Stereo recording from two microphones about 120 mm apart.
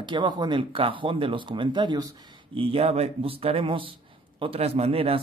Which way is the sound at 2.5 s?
50° right (ahead or behind).